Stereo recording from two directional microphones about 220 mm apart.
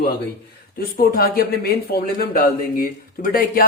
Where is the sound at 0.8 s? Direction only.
45° left (ahead or behind).